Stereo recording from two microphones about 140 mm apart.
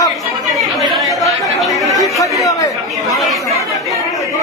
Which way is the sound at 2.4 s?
25° left (ahead or behind).